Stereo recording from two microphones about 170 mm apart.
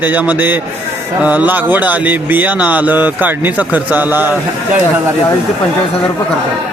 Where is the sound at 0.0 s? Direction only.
10° right (ahead or behind).